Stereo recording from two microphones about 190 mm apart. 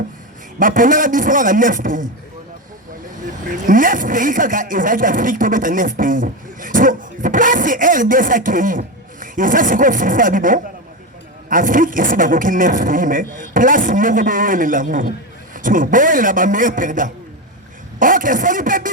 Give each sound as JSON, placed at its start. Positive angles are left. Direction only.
{"t": 0.6, "sound": "speech", "side_deg": -45}
{"t": 3.5, "sound": "speech", "side_deg": -45}